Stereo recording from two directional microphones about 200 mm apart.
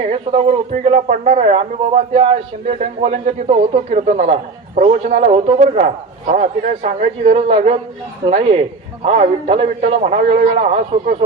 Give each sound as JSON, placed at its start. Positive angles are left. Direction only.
{"t": 0.0, "sound": "speech", "side_deg": -30}